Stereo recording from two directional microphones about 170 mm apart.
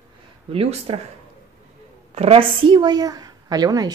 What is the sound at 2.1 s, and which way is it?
A woman's voice, 35° right (ahead or behind).